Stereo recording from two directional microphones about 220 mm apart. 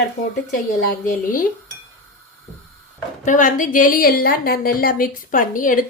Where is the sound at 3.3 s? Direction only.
35° left (ahead or behind).